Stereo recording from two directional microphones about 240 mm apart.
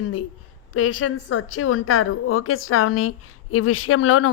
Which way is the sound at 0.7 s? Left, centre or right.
Left.